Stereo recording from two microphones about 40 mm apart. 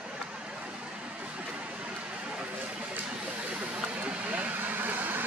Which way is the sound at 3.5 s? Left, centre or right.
Right.